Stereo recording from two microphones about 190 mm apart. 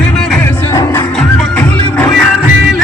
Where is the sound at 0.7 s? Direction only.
15° left (ahead or behind).